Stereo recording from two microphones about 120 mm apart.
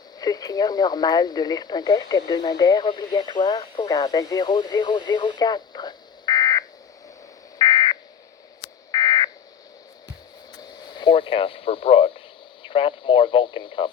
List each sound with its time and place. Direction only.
0.2 s speech: 35° left (ahead or behind)
4.4 s radio: 40° left (ahead or behind)
7.6 s fire alarm: 30° left (ahead or behind)
8.9 s buzzer: 35° left (ahead or behind)
10.6 s a sound: 35° left (ahead or behind); by 12.2 s 50° left (ahead or behind)
12.6 s speech: 45° left (ahead or behind)